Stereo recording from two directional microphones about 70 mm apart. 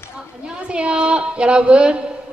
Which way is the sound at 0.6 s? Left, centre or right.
Centre.